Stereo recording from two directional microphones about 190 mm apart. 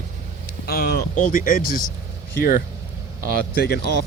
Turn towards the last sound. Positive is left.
turn(degrees=55)  # may be behind; listen again after turning